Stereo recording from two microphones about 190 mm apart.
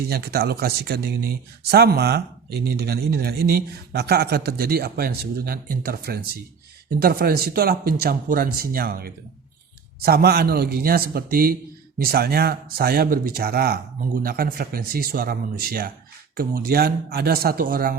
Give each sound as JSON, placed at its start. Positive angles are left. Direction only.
{"t": 0.1, "sound": "speech", "side_deg": -55}